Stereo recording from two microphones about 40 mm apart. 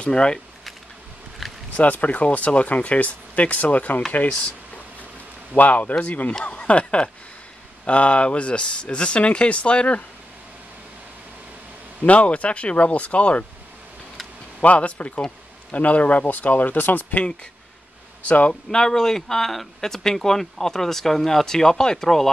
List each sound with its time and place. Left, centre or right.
0.0 s speech: left
1.4 s a sound: centre
1.8 s speech: left
5.5 s speech: left
12.1 s speech: left
14.6 s speech: left
18.5 s speech: centre